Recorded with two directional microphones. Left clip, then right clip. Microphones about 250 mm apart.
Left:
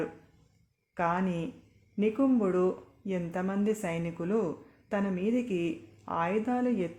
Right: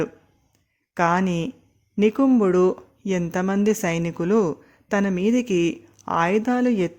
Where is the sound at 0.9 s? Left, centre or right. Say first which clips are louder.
Right 9 dB; right.